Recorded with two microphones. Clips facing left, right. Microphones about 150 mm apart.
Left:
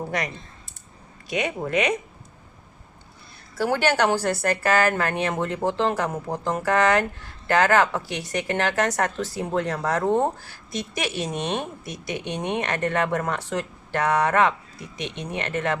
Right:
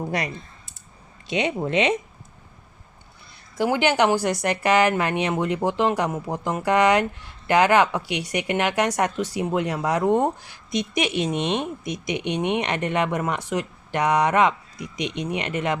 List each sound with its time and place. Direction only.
1.3 s speech: 25° right (ahead or behind)
3.5 s speech: 15° right (ahead or behind)